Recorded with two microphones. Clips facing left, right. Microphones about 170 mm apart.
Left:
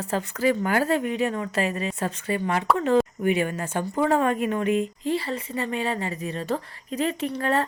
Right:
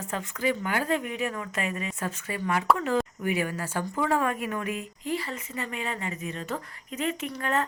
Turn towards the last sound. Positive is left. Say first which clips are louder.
# left 4 dB
turn(degrees=35)  # may be behind; listen again after turning